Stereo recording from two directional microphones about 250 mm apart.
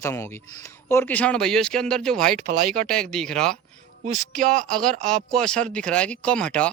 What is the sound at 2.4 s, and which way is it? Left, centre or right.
Speech, right.